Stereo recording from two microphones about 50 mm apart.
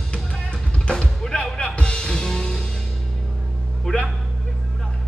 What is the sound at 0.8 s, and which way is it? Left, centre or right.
Music, centre.